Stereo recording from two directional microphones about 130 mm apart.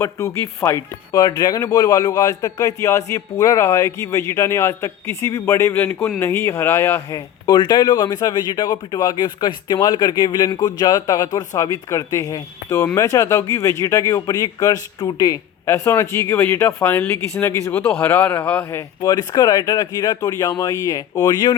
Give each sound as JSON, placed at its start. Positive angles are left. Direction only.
{"t": 0.0, "sound": "a man's voice", "side_deg": 20}
{"t": 19.0, "sound": "speech", "side_deg": 30}